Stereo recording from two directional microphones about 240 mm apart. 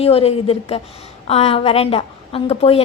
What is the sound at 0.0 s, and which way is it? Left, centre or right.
A woman's voice, left.